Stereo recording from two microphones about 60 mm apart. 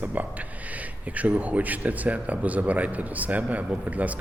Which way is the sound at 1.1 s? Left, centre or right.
Right.